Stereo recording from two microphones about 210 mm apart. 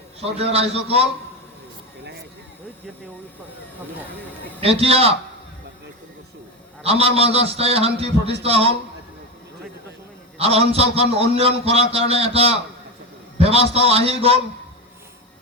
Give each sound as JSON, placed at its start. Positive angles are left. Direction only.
{"t": 0.2, "sound": "a man's voice", "side_deg": -30}
{"t": 4.6, "sound": "a man's voice", "side_deg": -30}
{"t": 6.8, "sound": "a man's voice", "side_deg": -30}
{"t": 10.3, "sound": "a man's voice", "side_deg": -30}